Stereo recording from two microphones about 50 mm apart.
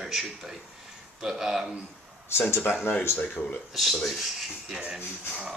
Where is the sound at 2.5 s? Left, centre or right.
Left.